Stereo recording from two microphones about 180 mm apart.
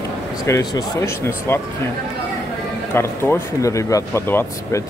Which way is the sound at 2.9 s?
15° left (ahead or behind).